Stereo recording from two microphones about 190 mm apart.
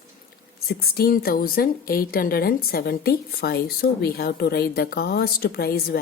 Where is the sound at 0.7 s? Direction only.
55° left (ahead or behind).